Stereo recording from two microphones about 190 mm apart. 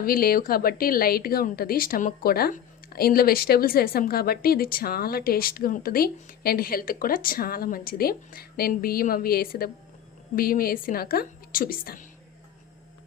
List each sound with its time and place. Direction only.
0.0 s speech: 50° left (ahead or behind)